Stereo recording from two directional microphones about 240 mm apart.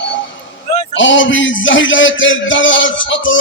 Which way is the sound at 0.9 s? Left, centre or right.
Left.